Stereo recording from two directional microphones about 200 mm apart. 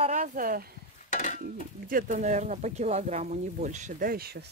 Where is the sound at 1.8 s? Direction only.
40° right (ahead or behind).